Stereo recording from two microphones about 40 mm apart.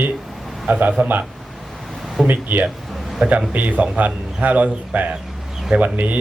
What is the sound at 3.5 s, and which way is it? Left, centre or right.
A man's voice, right.